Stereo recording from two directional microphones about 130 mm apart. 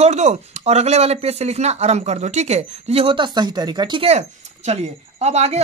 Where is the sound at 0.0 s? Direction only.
60° right (ahead or behind); by 4.1 s 35° right (ahead or behind).